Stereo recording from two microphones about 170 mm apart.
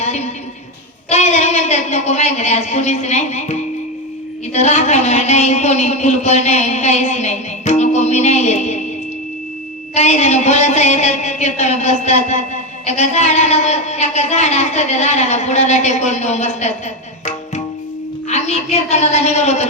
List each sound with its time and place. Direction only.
0.0 s a sound: 40° left (ahead or behind)
1.1 s speech: 40° left (ahead or behind)
9.9 s speech: 40° left (ahead or behind)
18.3 s speech: 40° left (ahead or behind)